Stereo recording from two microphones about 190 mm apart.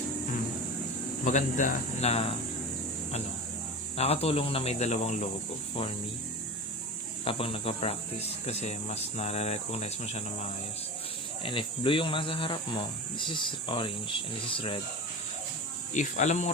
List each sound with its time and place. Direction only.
1.2 s speech: 40° left (ahead or behind)
3.9 s speech: 30° left (ahead or behind)
7.3 s speech: 30° left (ahead or behind)
11.4 s speech: 25° left (ahead or behind)
16.0 s speech: 40° left (ahead or behind)